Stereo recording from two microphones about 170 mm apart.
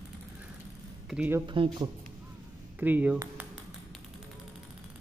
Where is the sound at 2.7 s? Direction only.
10° right (ahead or behind).